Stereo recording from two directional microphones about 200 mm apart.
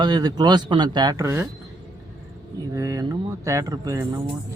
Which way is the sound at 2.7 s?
15° right (ahead or behind).